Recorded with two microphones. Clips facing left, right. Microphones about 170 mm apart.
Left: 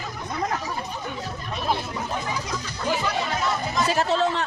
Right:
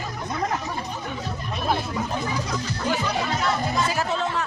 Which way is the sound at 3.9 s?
30° left (ahead or behind).